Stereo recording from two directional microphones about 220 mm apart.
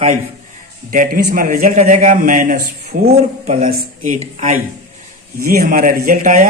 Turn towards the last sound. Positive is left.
turn(degrees=-35)  # may be behind; listen again after turning